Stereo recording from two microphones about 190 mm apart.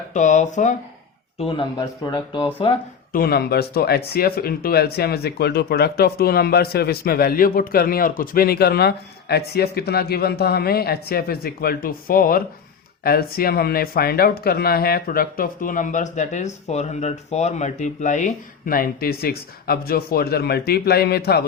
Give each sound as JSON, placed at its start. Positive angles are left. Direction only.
{"t": 0.1, "sound": "speech", "side_deg": 40}
{"t": 1.4, "sound": "speech", "side_deg": 25}
{"t": 3.1, "sound": "speech", "side_deg": 55}